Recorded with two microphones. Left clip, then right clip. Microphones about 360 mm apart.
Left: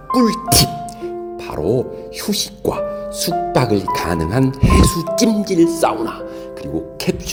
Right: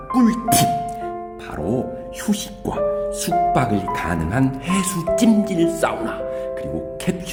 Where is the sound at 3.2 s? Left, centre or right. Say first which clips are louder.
Left 2 dB; centre.